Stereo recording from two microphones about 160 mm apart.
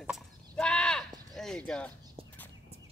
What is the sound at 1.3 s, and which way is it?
Speech, 5° left (ahead or behind).